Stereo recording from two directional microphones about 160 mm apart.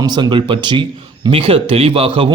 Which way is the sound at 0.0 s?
25° right (ahead or behind).